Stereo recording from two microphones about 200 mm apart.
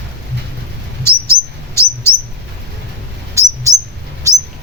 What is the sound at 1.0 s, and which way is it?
Bird, 15° left (ahead or behind).